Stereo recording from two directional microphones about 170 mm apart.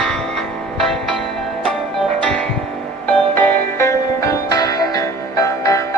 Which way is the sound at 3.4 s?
15° left (ahead or behind).